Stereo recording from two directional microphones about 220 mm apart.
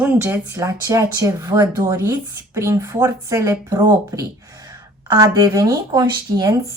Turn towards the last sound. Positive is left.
turn(degrees=-15)  # may be behind; listen again after turning